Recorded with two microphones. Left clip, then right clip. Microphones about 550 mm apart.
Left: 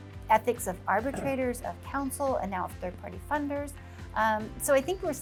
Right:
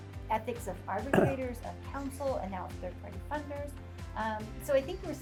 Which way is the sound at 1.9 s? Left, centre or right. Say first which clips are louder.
Left 5 dB; left.